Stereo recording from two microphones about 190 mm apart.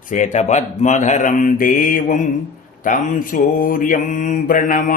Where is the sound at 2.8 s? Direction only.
45° left (ahead or behind).